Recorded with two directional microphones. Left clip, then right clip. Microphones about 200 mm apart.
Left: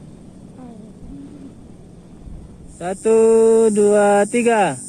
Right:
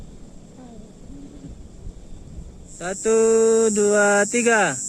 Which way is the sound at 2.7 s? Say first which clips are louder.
Left 4 dB; 20° right (ahead or behind).